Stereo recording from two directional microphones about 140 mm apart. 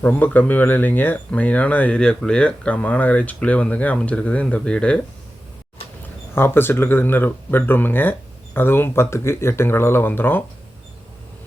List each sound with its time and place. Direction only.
0.0 s speech: 10° left (ahead or behind)
6.3 s speech: 15° left (ahead or behind)